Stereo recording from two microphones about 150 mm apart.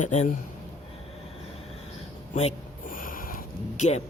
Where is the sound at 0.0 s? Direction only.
55° left (ahead or behind).